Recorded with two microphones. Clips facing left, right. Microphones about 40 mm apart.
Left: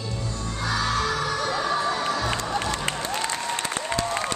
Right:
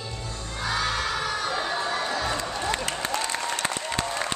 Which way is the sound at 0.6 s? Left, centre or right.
Centre.